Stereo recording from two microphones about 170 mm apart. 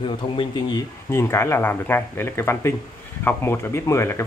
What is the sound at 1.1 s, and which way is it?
Speech, 15° left (ahead or behind).